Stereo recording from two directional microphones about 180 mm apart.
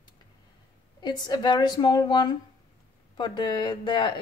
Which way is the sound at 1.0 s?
25° left (ahead or behind).